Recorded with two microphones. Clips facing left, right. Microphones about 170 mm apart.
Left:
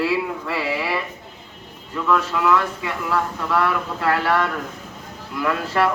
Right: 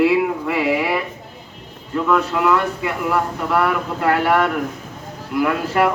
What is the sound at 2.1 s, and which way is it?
Speech, 20° right (ahead or behind).